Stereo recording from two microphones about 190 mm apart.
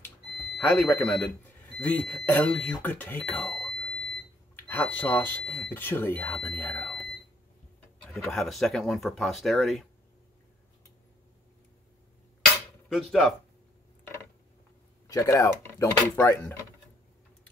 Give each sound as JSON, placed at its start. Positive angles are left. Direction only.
{"t": 0.4, "sound": "speech", "side_deg": 5}
{"t": 8.1, "sound": "speech", "side_deg": 0}
{"t": 15.0, "sound": "speech", "side_deg": 15}